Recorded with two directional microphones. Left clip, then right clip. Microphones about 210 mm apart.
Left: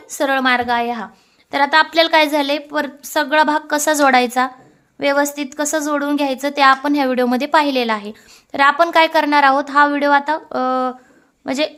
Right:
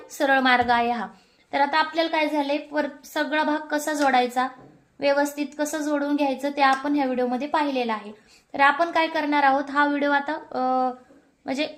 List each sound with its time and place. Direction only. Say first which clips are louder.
0.2 s a woman's voice: left 3 dB; 30° left (ahead or behind)
1.5 s a woman's voice: left 7 dB; 35° left (ahead or behind)